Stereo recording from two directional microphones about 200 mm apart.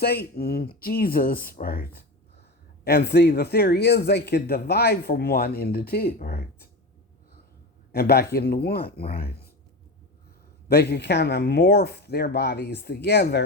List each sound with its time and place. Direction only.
0.0 s speech: 50° left (ahead or behind)
7.9 s speech: 50° left (ahead or behind)
10.7 s speech: 55° left (ahead or behind)